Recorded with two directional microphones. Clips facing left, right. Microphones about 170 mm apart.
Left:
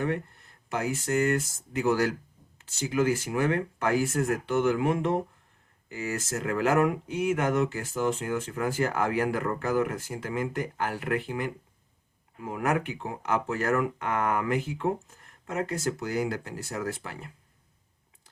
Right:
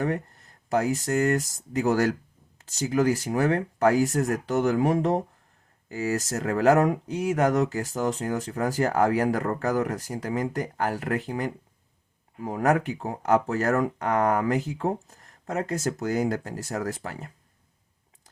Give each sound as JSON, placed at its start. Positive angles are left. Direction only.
{"t": 0.0, "sound": "speech", "side_deg": -40}